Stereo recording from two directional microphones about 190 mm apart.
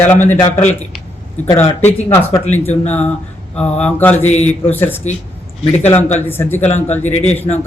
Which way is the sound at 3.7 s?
10° left (ahead or behind).